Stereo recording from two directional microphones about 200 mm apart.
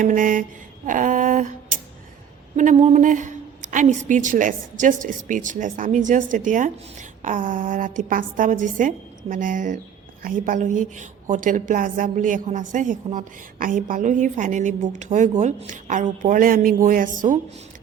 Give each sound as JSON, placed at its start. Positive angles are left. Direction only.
{"t": 0.0, "sound": "a woman's voice", "side_deg": -40}
{"t": 0.9, "sound": "a sound", "side_deg": -40}
{"t": 2.6, "sound": "a woman's voice", "side_deg": -35}